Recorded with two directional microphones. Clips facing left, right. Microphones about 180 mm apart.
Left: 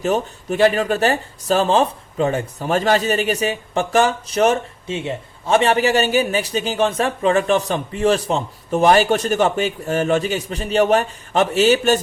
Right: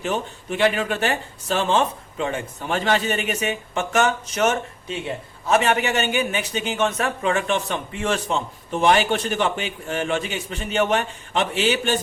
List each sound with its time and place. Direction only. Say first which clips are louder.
0.0 s speech: left 6 dB; 40° left (ahead or behind)